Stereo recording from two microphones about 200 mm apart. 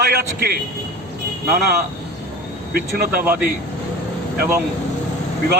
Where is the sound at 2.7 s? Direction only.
50° right (ahead or behind).